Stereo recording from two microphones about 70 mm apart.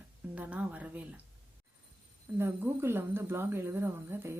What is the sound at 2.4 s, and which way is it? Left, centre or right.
Speech, right.